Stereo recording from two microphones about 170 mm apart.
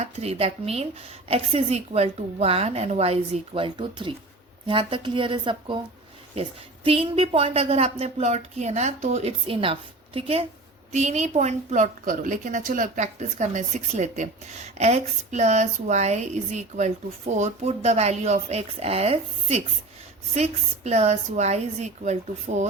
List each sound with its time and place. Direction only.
0.0 s a woman's voice: 40° right (ahead or behind)
6.8 s a woman's voice: 35° right (ahead or behind)